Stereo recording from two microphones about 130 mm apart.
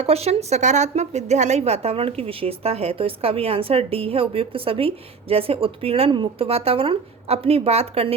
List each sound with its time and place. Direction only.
0.0 s a woman's voice: 55° right (ahead or behind)